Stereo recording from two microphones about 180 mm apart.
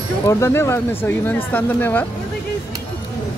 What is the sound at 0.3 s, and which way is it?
Speech, 15° left (ahead or behind).